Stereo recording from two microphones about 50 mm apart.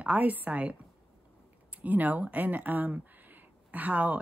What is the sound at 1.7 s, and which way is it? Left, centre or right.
Speech, right.